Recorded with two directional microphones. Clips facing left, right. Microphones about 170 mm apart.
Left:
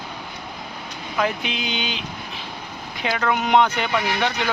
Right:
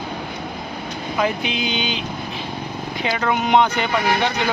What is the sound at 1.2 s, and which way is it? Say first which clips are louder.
Speech: right 2 dB; centre (ahead or behind).